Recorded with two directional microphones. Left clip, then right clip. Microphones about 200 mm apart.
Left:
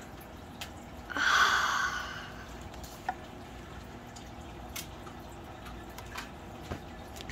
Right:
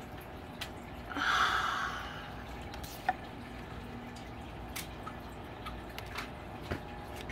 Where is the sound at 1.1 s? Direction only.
35° left (ahead or behind).